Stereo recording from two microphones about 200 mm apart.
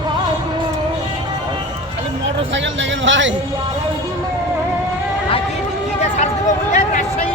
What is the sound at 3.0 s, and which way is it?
Music, 65° right (ahead or behind).